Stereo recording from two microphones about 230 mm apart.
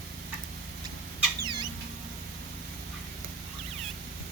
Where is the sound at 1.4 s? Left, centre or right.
Centre.